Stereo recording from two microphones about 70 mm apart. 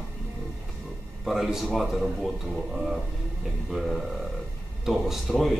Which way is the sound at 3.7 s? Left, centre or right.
Centre.